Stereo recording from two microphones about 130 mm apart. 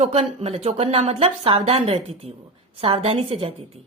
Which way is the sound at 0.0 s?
55° right (ahead or behind).